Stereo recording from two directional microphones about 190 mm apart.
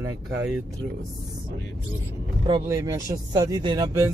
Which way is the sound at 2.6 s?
15° right (ahead or behind).